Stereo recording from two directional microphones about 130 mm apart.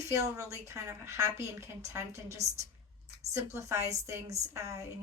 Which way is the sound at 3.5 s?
20° right (ahead or behind).